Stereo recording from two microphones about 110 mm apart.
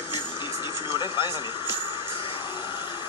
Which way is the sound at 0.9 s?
45° left (ahead or behind).